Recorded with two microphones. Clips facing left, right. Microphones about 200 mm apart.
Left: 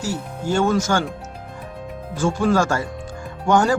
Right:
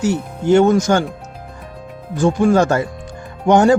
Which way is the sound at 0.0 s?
20° right (ahead or behind).